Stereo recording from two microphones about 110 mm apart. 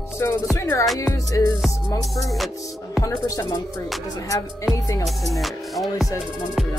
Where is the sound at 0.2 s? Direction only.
25° left (ahead or behind).